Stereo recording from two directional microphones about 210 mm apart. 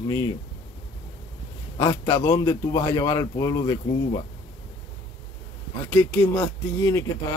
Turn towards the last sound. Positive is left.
turn(degrees=15)  # may be behind; listen again after turning